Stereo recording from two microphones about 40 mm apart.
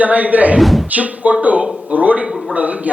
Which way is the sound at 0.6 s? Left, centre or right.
Centre.